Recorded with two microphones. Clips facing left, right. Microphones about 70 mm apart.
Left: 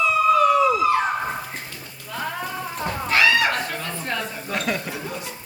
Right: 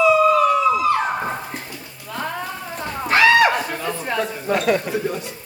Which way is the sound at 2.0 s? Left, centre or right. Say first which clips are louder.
Right 2 dB; centre.